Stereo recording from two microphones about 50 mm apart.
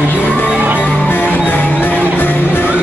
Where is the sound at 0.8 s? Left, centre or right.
Left.